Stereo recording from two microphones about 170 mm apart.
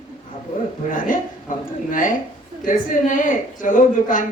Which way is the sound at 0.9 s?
55° left (ahead or behind).